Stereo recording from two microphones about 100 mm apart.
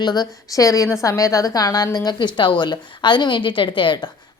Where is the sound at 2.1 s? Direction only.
50° left (ahead or behind).